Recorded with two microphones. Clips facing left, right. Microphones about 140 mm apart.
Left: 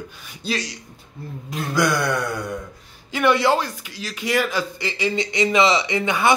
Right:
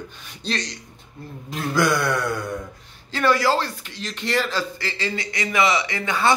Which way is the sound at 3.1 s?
15° left (ahead or behind).